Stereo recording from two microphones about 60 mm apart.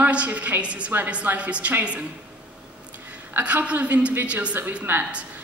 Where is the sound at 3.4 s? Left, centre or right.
Right.